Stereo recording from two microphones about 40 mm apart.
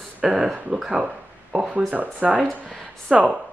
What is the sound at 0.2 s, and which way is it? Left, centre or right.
Speech, centre.